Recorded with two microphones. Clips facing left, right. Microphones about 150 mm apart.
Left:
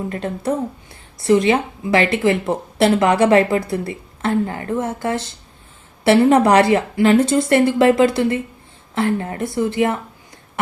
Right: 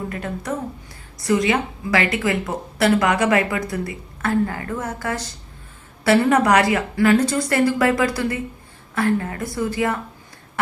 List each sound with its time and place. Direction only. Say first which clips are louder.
0.1 s speech: left 5 dB; 30° left (ahead or behind)